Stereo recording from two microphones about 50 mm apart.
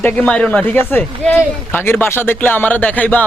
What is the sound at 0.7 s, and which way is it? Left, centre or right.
Speech, left.